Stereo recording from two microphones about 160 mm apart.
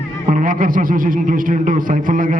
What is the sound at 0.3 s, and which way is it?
A man's voice, 55° right (ahead or behind).